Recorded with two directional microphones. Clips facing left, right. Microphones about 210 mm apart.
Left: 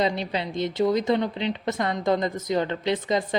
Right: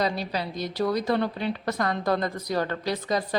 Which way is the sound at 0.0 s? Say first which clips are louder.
Left 2 dB; 20° left (ahead or behind).